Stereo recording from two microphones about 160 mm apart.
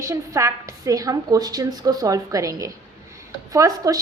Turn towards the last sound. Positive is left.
turn(degrees=-20)  # may be behind; listen again after turning